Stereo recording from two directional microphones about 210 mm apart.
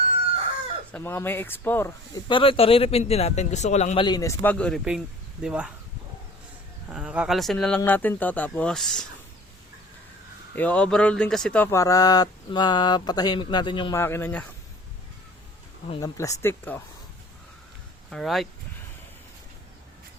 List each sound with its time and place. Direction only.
0.9 s speech: 10° left (ahead or behind)
6.9 s speech: 5° right (ahead or behind)
10.5 s speech: 5° left (ahead or behind); by 14.0 s 20° left (ahead or behind)
14.0 s speech: 10° left (ahead or behind)
15.9 s speech: 15° left (ahead or behind)
18.1 s speech: centre (ahead or behind)